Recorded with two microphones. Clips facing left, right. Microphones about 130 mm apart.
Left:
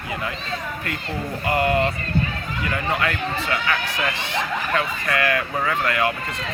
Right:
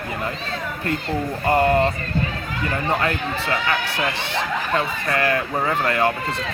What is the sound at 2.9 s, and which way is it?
Speech, 35° right (ahead or behind).